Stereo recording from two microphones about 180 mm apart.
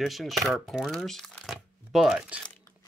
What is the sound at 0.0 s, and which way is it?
Speech, centre (ahead or behind).